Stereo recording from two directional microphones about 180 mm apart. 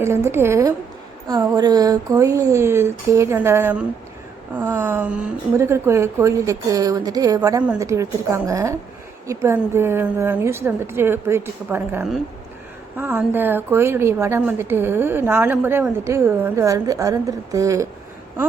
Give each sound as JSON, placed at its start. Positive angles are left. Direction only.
{"t": 0.0, "sound": "a woman's voice", "side_deg": -15}